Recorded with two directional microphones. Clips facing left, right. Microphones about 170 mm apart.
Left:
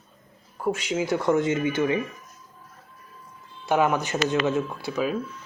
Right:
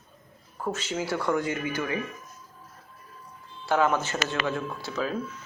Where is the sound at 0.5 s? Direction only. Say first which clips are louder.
Left 5 dB; 10° left (ahead or behind).